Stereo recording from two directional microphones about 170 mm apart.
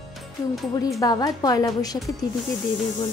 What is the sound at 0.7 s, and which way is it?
A woman's voice, 20° left (ahead or behind).